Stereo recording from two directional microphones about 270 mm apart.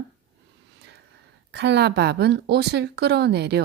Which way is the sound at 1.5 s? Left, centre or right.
Right.